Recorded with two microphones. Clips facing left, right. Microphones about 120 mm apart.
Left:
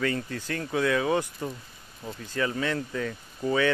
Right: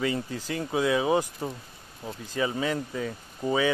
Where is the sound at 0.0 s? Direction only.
15° right (ahead or behind).